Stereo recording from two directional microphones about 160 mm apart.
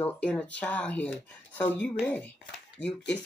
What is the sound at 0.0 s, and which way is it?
Speech, 5° left (ahead or behind).